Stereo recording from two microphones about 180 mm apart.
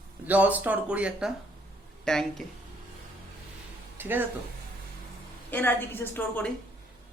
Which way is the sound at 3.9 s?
10° right (ahead or behind).